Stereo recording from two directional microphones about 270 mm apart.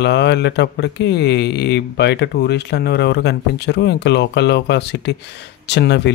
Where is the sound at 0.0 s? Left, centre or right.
Left.